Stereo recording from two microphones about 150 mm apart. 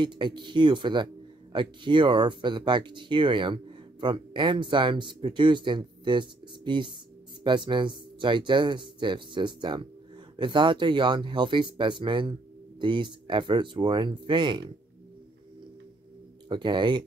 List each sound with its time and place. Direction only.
0.0 s speech: 30° right (ahead or behind)
16.4 s speech: 30° right (ahead or behind)